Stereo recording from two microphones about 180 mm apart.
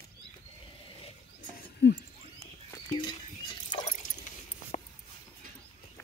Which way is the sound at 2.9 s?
25° left (ahead or behind).